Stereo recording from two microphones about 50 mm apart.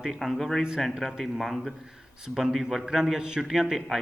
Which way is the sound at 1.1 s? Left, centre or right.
Centre.